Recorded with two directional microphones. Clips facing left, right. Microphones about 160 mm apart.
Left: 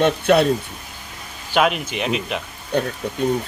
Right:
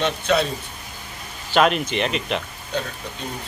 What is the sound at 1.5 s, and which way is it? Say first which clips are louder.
Speech: right 1 dB; 5° left (ahead or behind).